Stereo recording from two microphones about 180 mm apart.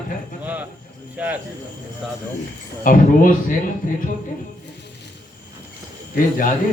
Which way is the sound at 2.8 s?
50° left (ahead or behind).